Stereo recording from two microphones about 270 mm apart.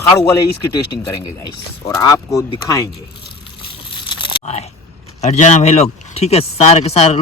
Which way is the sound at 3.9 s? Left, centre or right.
Centre.